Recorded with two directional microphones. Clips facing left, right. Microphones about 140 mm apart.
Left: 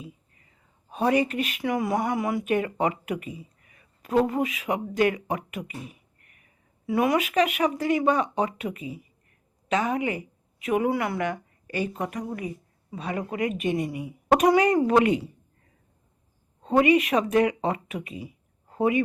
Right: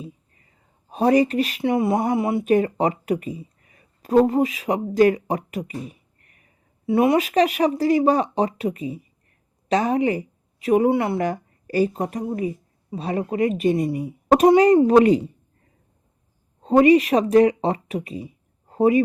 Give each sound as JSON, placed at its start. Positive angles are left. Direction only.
{"t": 0.9, "sound": "a woman's voice", "side_deg": -35}
{"t": 16.6, "sound": "a woman's voice", "side_deg": -35}